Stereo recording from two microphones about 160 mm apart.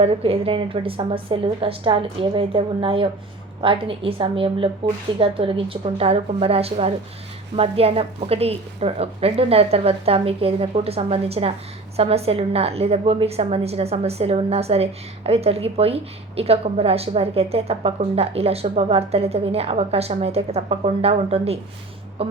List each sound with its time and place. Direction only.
0.0 s a woman's voice: 40° right (ahead or behind)